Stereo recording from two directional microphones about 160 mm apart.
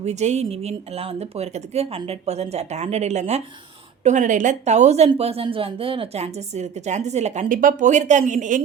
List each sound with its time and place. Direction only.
0.0 s a woman's voice: 45° right (ahead or behind)